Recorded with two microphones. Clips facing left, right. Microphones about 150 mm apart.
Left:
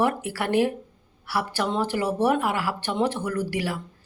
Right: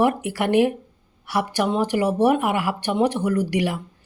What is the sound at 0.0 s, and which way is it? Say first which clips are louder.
Speech: right 4 dB; 15° right (ahead or behind).